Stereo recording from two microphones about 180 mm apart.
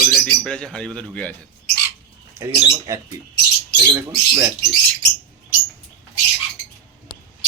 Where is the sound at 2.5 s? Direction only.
25° right (ahead or behind).